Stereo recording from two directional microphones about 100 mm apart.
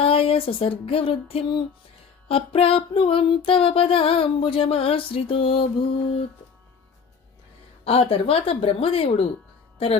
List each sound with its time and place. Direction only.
0.0 s music: 70° left (ahead or behind)
2.2 s female singing: 65° left (ahead or behind)
7.9 s female singing: 70° left (ahead or behind)
9.7 s speech: 80° left